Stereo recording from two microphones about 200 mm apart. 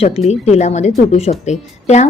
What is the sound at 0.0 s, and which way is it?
Speech, 30° left (ahead or behind).